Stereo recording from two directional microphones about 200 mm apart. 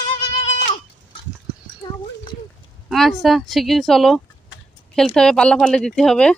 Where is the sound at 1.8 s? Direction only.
20° left (ahead or behind).